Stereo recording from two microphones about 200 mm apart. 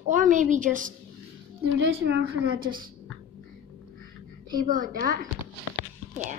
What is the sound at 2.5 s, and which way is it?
Speech, 45° right (ahead or behind).